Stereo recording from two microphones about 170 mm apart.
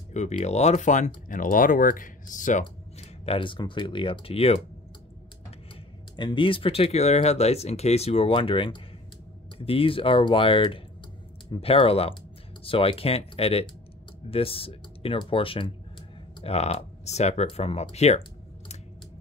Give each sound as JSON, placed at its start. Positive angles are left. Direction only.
{"t": 0.1, "sound": "speech", "side_deg": 40}
{"t": 2.6, "sound": "speech", "side_deg": 30}
{"t": 6.1, "sound": "speech", "side_deg": 30}